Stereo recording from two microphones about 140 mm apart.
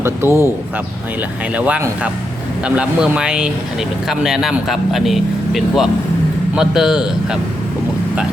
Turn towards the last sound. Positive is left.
turn(degrees=-5)  # may be behind; listen again after turning